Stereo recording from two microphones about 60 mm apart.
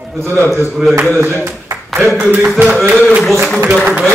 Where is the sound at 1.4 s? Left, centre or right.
Right.